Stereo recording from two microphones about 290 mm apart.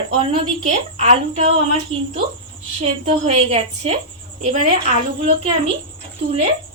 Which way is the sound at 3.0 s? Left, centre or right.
Right.